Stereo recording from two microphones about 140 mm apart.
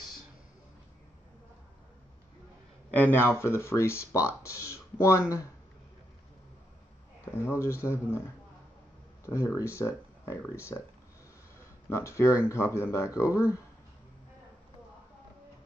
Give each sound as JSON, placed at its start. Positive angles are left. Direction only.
{"t": 2.9, "sound": "speech", "side_deg": 15}
{"t": 7.3, "sound": "speech", "side_deg": 20}
{"t": 9.2, "sound": "speech", "side_deg": 20}
{"t": 11.9, "sound": "speech", "side_deg": 20}